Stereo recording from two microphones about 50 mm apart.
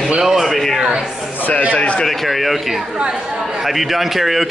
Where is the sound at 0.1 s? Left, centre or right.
Centre.